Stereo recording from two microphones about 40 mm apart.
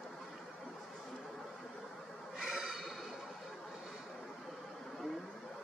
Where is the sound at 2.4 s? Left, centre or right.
Centre.